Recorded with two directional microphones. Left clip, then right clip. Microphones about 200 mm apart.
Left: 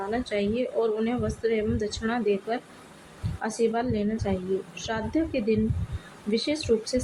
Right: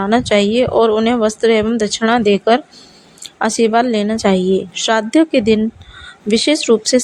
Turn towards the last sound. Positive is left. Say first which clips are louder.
# right 13 dB
turn(degrees=-55)  # may be behind; listen again after turning